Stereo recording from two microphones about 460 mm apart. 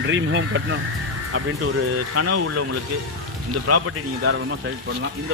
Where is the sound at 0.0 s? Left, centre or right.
Right.